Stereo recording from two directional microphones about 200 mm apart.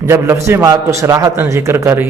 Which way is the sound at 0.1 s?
10° right (ahead or behind).